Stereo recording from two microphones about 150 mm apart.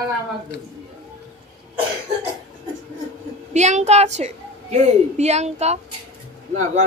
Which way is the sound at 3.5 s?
50° right (ahead or behind).